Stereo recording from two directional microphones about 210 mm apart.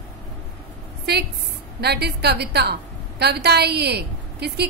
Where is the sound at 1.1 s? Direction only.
50° right (ahead or behind).